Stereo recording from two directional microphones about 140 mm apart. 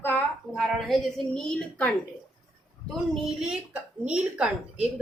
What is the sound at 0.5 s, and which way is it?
A woman's voice, centre (ahead or behind).